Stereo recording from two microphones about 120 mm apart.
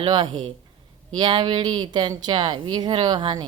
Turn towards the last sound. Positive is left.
turn(degrees=-40)  # may be behind; listen again after turning